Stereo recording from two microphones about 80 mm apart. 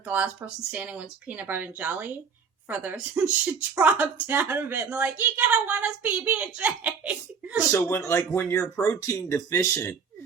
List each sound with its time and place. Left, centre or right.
0.1 s speech: right
7.8 s speech: left